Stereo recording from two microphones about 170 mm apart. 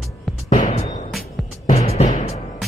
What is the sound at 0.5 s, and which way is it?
Music, 45° left (ahead or behind).